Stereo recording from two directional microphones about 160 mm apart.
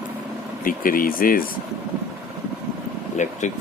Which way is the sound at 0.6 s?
60° left (ahead or behind).